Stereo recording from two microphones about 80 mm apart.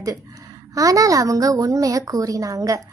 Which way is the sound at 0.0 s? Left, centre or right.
Right.